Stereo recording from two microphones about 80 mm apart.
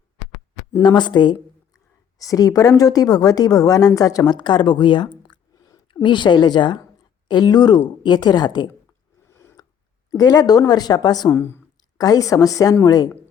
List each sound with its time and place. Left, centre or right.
0.8 s a woman's voice: left
2.1 s a woman's voice: left
5.9 s a woman's voice: left
9.3 s a sound: left
10.1 s a woman's voice: left
11.3 s speech: left
11.9 s a woman's voice: left